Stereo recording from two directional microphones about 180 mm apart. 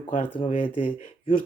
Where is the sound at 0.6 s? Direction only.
30° left (ahead or behind).